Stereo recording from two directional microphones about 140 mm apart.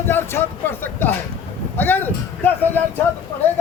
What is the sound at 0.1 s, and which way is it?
Speech, 15° left (ahead or behind).